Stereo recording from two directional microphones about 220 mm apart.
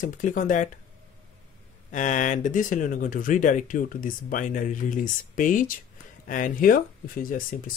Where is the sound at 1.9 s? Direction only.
35° left (ahead or behind).